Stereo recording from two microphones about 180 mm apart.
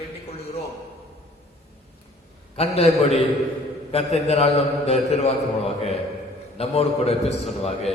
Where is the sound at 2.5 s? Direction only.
35° left (ahead or behind).